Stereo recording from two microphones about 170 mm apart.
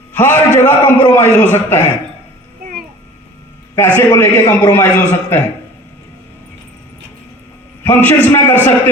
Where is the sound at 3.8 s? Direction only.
10° left (ahead or behind).